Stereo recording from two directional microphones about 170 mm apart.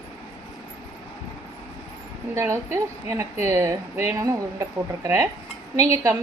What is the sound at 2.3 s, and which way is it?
A woman's voice, 15° right (ahead or behind).